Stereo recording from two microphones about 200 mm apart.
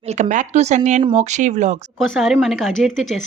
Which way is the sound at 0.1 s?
40° right (ahead or behind).